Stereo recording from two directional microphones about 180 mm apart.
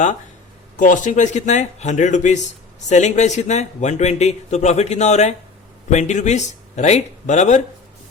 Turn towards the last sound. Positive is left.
turn(degrees=40)  # may be behind; listen again after turning